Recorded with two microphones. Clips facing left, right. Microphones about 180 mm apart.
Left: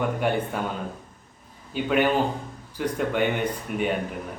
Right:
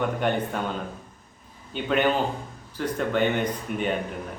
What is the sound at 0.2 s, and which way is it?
Speech, 5° left (ahead or behind).